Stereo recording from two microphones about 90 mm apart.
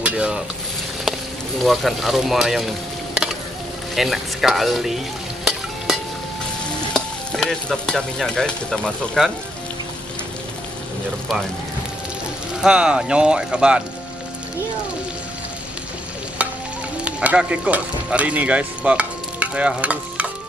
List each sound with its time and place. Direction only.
0.0 s stir: 10° right (ahead or behind)
1.6 s speech: centre (ahead or behind)
3.9 s frying: centre (ahead or behind)
6.9 s speech: 5° left (ahead or behind)
12.6 s speech: 10° right (ahead or behind)
17.0 s speech: 15° right (ahead or behind)